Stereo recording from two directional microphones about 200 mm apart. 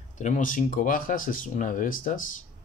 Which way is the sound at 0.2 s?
40° left (ahead or behind).